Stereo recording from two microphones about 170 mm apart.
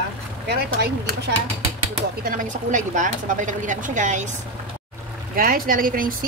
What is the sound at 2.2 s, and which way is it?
Speech, 50° right (ahead or behind).